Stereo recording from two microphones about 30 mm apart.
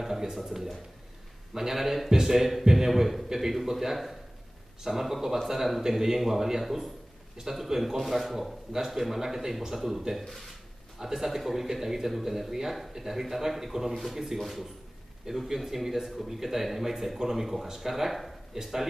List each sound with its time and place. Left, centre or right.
0.0 s a man's voice: centre
2.0 s a man's voice: centre
11.0 s a man's voice: centre